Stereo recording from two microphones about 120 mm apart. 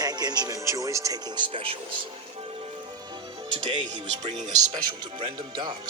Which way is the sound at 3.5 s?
45° right (ahead or behind).